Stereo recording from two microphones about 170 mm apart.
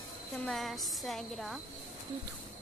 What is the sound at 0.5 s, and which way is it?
Speech, centre (ahead or behind).